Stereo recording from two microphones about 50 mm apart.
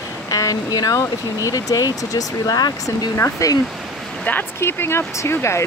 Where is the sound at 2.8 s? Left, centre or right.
Left.